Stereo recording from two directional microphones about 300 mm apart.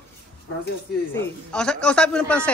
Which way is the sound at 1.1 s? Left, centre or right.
Centre.